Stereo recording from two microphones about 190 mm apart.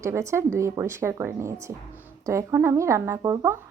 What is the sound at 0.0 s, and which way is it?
A woman's voice, 15° right (ahead or behind).